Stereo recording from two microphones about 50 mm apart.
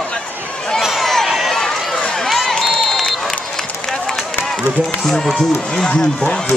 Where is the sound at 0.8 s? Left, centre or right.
Centre.